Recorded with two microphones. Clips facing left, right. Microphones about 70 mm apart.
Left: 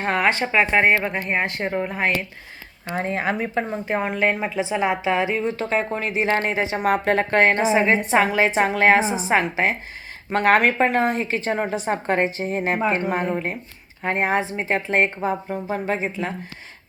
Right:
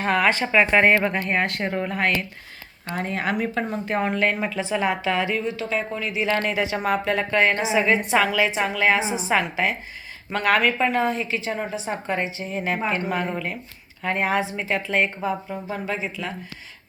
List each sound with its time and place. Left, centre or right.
0.0 s speech: left
5.5 s a woman's voice: left
6.4 s a woman's voice: left
6.8 s a woman's voice: left